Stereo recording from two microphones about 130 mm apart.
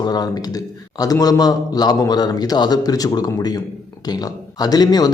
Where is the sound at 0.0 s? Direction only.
30° left (ahead or behind).